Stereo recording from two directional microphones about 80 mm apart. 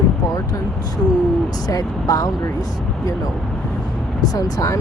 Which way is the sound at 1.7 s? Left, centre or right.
Left.